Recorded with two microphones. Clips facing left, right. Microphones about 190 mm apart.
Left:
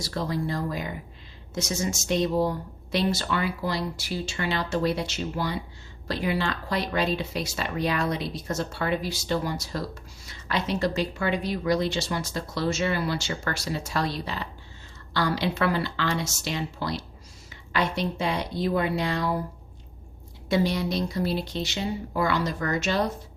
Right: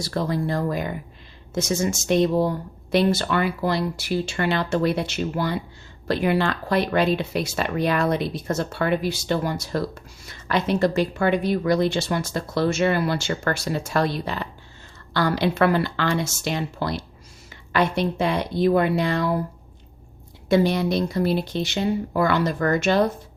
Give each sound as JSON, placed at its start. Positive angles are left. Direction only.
{"t": 0.0, "sound": "speech", "side_deg": -55}
{"t": 20.5, "sound": "speech", "side_deg": -55}